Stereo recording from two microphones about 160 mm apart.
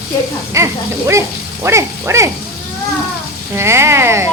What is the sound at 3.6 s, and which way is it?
Speech, 15° right (ahead or behind).